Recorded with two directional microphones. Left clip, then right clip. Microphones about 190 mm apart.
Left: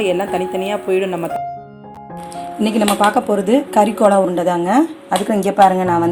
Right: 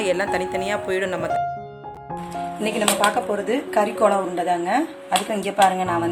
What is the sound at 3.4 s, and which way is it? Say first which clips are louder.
A woman's voice: left 7 dB; 35° left (ahead or behind).